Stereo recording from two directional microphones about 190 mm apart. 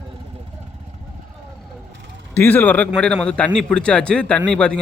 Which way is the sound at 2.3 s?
10° left (ahead or behind).